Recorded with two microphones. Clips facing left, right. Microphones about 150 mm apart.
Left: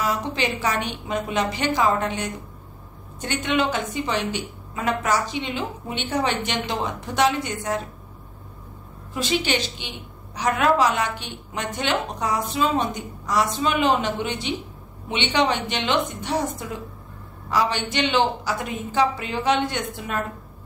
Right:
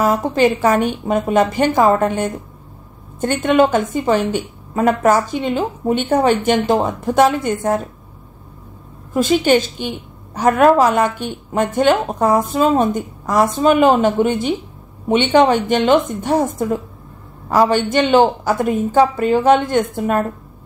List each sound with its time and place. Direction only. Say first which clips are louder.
0.0 s a woman's voice: right 10 dB; 50° right (ahead or behind)
9.1 s a woman's voice: right 10 dB; 50° right (ahead or behind)